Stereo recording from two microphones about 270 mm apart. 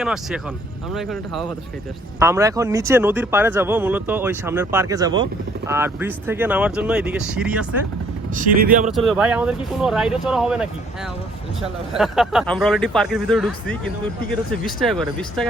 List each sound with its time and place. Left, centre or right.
0.0 s speech: centre
2.1 s speech: centre
8.4 s speech: right
9.0 s speech: centre
11.9 s speech: centre